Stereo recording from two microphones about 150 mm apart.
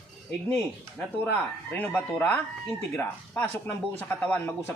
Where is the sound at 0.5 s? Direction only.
10° left (ahead or behind).